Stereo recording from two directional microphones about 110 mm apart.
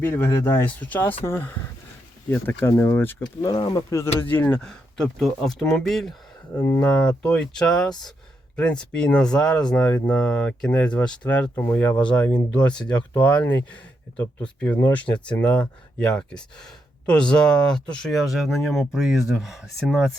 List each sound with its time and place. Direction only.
0.0 s speech: 20° left (ahead or behind)
3.4 s speech: 35° left (ahead or behind); by 4.6 s 15° left (ahead or behind)
4.6 s speech: 5° left (ahead or behind)
6.7 s speech: 35° left (ahead or behind)
7.2 s speech: 10° left (ahead or behind)